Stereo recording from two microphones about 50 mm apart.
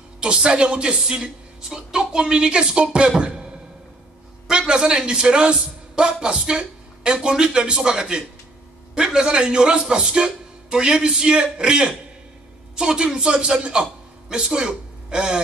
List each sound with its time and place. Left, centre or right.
0.2 s a woman's voice: centre